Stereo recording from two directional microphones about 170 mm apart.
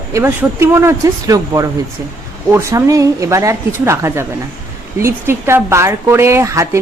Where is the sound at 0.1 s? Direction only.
15° right (ahead or behind).